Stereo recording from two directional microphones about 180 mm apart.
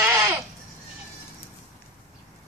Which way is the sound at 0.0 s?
10° right (ahead or behind).